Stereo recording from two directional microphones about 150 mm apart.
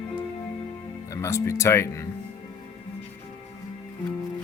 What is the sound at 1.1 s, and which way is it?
Speech, 20° left (ahead or behind).